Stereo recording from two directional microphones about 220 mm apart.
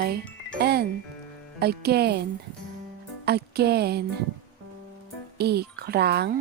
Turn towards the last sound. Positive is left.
turn(degrees=-50)  # may be behind; listen again after turning